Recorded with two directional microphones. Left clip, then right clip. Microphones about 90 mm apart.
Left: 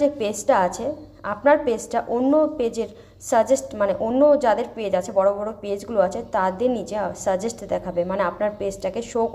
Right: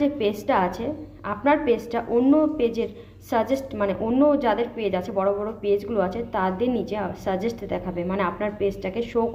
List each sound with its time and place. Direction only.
0.0 s a woman's voice: 35° left (ahead or behind)
2.1 s a woman's voice: 25° left (ahead or behind)